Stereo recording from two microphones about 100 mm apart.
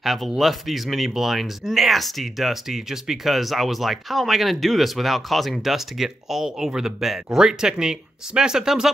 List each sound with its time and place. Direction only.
0.0 s speech: centre (ahead or behind)